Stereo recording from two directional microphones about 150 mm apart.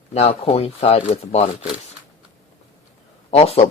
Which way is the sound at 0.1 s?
45° left (ahead or behind).